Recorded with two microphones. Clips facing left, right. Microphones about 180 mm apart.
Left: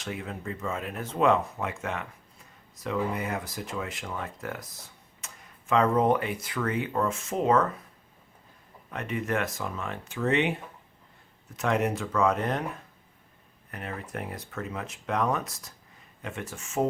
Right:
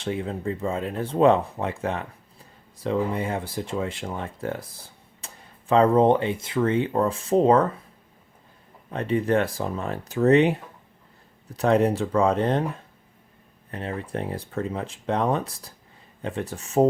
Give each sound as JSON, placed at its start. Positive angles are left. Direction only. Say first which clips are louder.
{"t": 0.0, "sound": "speech", "louder": "right 8 dB", "side_deg": -30}
{"t": 8.9, "sound": "speech", "louder": "right 8 dB", "side_deg": -30}
{"t": 13.7, "sound": "speech", "louder": "right 6 dB", "side_deg": -30}